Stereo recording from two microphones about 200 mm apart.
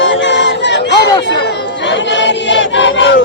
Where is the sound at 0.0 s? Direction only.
65° left (ahead or behind).